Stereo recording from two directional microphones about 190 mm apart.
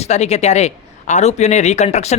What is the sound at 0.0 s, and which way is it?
A man's voice, 35° left (ahead or behind).